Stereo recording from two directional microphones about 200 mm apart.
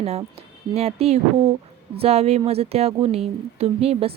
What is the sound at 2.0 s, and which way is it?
Speech, 30° right (ahead or behind).